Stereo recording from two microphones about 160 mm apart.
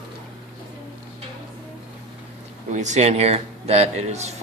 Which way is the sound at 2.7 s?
45° right (ahead or behind).